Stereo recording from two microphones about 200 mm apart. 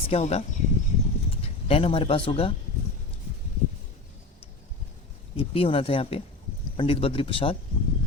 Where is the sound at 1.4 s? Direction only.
30° left (ahead or behind).